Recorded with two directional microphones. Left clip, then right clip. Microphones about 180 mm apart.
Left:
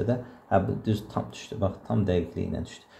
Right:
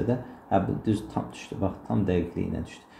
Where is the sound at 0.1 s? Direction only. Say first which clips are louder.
Left 1 dB; 25° left (ahead or behind).